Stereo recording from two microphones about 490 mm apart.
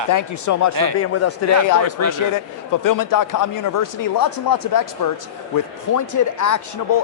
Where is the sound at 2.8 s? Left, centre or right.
Left.